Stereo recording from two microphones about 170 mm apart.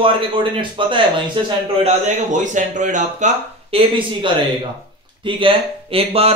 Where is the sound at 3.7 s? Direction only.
35° right (ahead or behind).